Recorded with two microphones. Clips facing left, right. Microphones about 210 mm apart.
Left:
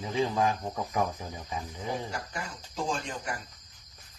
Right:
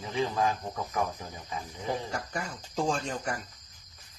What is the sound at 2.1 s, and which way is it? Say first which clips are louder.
Speech: right 2 dB; 45° right (ahead or behind).